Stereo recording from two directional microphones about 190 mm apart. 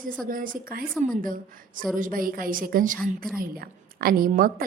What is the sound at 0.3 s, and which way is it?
A woman's voice, 45° right (ahead or behind).